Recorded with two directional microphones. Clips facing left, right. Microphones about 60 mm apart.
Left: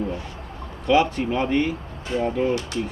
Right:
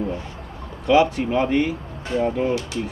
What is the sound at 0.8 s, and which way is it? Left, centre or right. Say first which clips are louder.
Speech: right 2 dB; centre.